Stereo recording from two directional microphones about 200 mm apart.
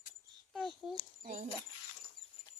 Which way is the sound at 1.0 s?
40° right (ahead or behind).